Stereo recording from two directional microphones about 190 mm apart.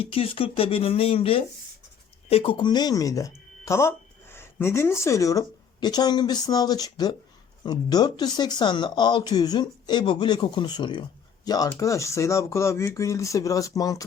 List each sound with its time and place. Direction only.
0.0 s speech: 30° left (ahead or behind)